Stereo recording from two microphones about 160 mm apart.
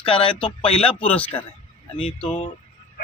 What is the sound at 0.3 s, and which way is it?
Speech, 5° left (ahead or behind).